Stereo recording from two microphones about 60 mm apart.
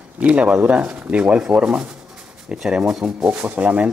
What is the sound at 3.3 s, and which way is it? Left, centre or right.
Speech, right.